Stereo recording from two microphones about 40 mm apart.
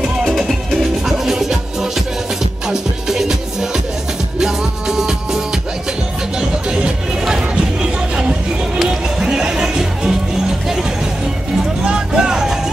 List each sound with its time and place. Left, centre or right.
0.2 s music: centre
2.7 s music: centre
7.2 s music: centre
11.8 s music: right